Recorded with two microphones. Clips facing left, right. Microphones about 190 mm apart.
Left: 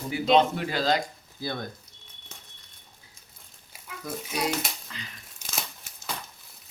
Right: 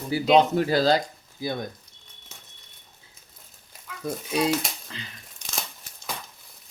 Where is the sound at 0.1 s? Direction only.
35° right (ahead or behind).